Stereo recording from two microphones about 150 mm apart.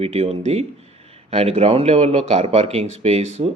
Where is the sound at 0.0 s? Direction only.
45° right (ahead or behind).